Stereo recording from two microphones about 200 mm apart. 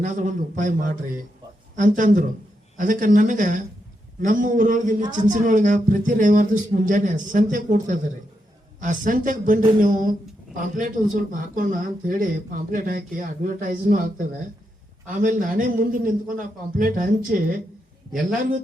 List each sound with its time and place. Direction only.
0.0 s a man's voice: 40° right (ahead or behind)